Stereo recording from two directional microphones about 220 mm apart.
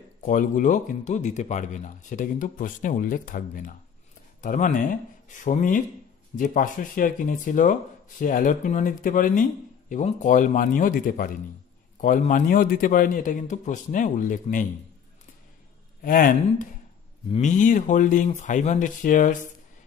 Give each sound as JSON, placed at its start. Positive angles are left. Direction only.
{"t": 0.2, "sound": "speech", "side_deg": 35}
{"t": 16.0, "sound": "speech", "side_deg": 40}